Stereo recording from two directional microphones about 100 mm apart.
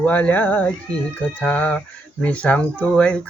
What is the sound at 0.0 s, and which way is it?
Speech, 15° left (ahead or behind).